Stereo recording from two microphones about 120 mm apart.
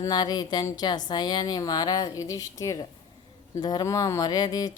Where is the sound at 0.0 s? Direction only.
35° left (ahead or behind).